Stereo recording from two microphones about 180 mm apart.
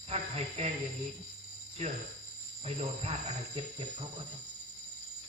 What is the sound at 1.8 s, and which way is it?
Speech, 40° right (ahead or behind).